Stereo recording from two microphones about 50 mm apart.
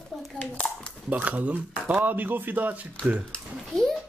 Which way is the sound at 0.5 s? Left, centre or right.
Centre.